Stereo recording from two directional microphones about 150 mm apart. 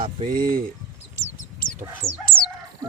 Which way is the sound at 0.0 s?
35° right (ahead or behind).